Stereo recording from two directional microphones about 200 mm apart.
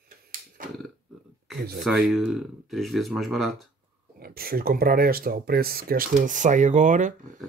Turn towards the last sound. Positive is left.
turn(degrees=-40)  # may be behind; listen again after turning